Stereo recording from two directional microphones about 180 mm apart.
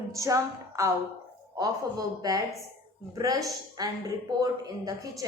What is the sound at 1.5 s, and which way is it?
A woman's voice, 20° right (ahead or behind).